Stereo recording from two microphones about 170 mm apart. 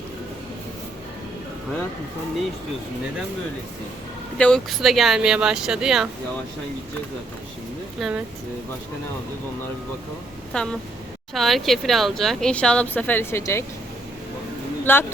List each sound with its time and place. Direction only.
4.4 s speech: 5° left (ahead or behind)
7.9 s speech: centre (ahead or behind)
10.5 s speech: 5° left (ahead or behind)
14.9 s speech: 10° left (ahead or behind)